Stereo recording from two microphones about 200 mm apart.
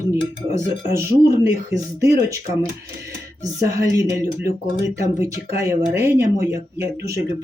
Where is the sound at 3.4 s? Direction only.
15° right (ahead or behind).